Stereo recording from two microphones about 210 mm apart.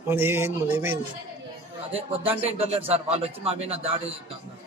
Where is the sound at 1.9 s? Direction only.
25° right (ahead or behind).